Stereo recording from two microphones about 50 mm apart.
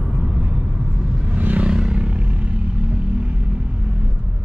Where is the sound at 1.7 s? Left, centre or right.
Centre.